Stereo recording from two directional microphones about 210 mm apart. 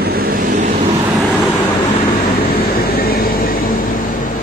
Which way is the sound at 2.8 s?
45° left (ahead or behind).